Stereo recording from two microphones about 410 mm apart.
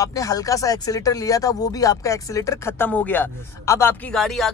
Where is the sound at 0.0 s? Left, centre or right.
Centre.